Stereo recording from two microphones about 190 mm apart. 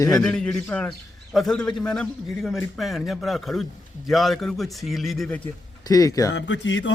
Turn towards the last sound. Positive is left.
turn(degrees=70)  # may be behind; listen again after turning